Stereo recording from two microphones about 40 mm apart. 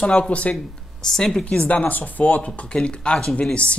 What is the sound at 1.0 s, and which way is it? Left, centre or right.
Speech, centre.